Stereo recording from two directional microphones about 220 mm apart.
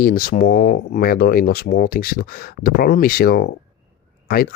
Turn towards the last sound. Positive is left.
turn(degrees=40)  # may be behind; listen again after turning